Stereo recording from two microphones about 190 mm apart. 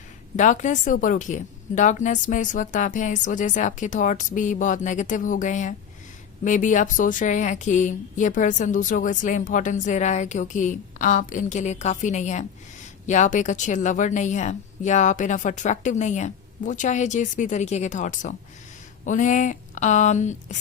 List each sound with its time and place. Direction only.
0.3 s speech: 40° left (ahead or behind)